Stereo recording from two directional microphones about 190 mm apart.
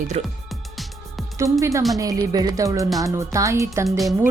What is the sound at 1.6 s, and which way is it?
Speech, 15° right (ahead or behind).